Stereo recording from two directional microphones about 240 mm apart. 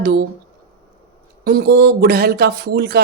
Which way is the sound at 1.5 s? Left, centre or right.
Right.